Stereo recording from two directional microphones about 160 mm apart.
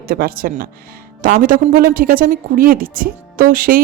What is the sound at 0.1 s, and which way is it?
Speech, 65° right (ahead or behind).